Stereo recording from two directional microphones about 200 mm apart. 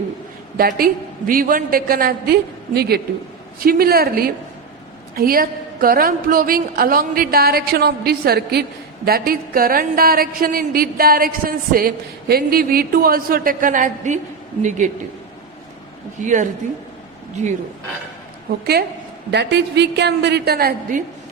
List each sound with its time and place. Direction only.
0.5 s a woman's voice: 50° right (ahead or behind)
16.2 s a man's voice: 40° right (ahead or behind)
18.6 s a woman's voice: 50° right (ahead or behind)